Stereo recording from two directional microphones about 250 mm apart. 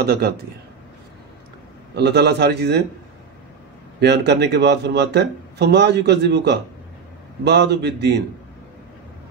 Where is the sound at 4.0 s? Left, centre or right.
Right.